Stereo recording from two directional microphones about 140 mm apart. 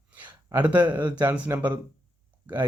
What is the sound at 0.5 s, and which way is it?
Speech, 10° right (ahead or behind).